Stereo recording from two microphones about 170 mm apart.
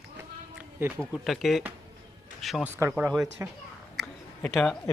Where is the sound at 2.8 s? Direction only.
10° right (ahead or behind).